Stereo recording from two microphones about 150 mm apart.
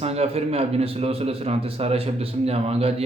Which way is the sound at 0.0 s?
45° right (ahead or behind).